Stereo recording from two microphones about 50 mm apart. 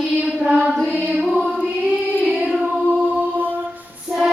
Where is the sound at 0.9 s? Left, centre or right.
Right.